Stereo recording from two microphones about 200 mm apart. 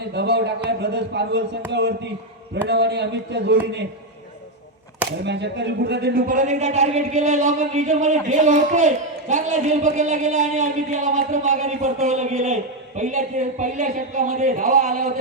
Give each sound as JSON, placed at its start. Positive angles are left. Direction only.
{"t": 0.2, "sound": "a man's voice", "side_deg": -55}
{"t": 5.2, "sound": "speech", "side_deg": -60}